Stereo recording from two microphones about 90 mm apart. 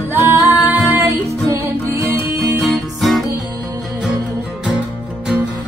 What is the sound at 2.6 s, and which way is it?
Music, centre (ahead or behind).